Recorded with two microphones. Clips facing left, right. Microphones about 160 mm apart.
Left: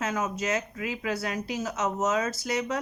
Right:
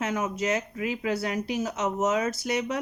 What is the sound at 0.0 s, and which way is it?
Speech, 20° right (ahead or behind).